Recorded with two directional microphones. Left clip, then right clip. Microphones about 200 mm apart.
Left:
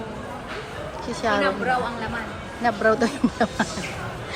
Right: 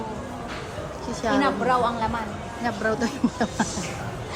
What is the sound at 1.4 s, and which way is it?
Speech, 55° right (ahead or behind).